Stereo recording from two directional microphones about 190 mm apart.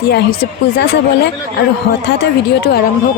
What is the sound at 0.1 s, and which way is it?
Speech, 55° left (ahead or behind).